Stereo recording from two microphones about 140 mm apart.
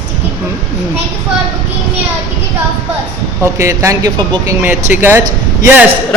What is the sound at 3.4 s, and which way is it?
Speech, 20° right (ahead or behind).